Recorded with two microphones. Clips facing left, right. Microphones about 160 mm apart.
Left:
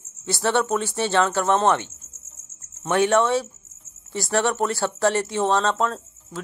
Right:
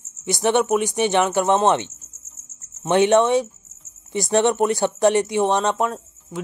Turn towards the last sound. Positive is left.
turn(degrees=-15)  # may be behind; listen again after turning